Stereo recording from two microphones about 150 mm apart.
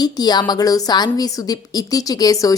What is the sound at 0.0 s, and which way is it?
A woman's voice, 30° left (ahead or behind).